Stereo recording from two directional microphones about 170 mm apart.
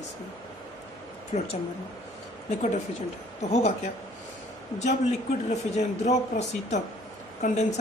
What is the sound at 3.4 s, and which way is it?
Speech, 40° left (ahead or behind).